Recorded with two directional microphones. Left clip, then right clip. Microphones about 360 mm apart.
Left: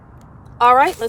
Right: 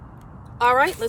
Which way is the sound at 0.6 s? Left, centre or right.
Centre.